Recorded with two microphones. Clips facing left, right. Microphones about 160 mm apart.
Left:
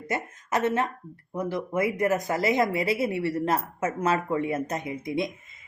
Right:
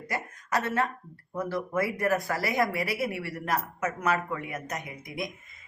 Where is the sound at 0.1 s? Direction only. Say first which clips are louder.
Left 2 dB; 20° left (ahead or behind).